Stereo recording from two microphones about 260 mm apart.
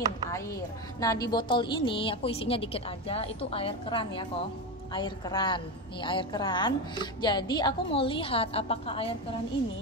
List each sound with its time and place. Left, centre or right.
0.3 s a woman's voice: centre